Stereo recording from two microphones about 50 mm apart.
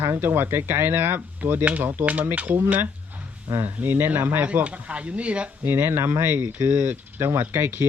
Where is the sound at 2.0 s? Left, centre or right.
Right.